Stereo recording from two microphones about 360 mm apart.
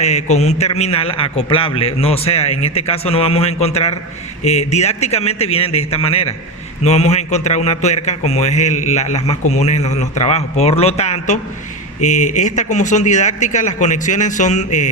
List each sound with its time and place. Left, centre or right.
0.0 s a man's voice: centre